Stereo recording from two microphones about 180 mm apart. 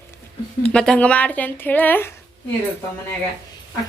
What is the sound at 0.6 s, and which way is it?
A woman's voice, 5° left (ahead or behind).